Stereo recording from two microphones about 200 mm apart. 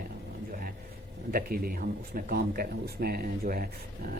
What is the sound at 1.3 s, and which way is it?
Speech, 45° right (ahead or behind).